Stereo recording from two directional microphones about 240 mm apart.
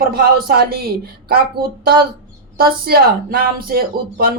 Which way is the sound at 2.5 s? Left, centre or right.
Right.